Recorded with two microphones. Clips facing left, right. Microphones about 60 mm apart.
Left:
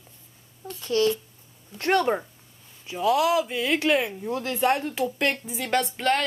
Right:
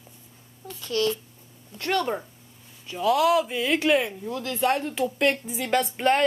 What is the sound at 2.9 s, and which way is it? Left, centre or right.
A woman's voice, centre.